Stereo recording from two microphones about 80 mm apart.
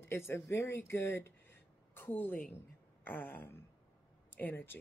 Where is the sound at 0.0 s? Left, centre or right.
Left.